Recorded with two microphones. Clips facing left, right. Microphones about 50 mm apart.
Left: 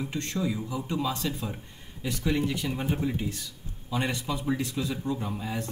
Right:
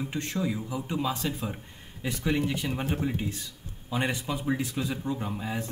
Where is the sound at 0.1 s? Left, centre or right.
Centre.